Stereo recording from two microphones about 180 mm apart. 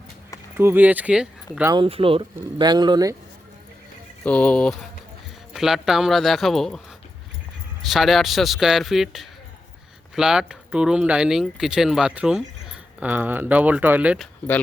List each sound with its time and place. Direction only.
0.5 s speech: 10° right (ahead or behind)
1.7 s speech: 30° right (ahead or behind)
4.2 s speech: 5° left (ahead or behind)